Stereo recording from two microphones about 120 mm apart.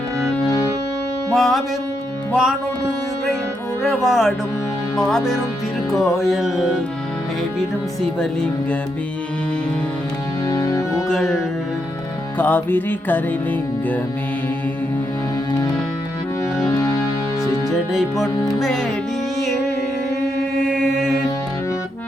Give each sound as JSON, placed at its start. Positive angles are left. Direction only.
{"t": 1.4, "sound": "music", "side_deg": 0}
{"t": 4.0, "sound": "music", "side_deg": 0}
{"t": 10.5, "sound": "music", "side_deg": 30}
{"t": 11.1, "sound": "music", "side_deg": 0}
{"t": 12.4, "sound": "music", "side_deg": 15}
{"t": 18.6, "sound": "music", "side_deg": 5}
{"t": 20.7, "sound": "mantra", "side_deg": -5}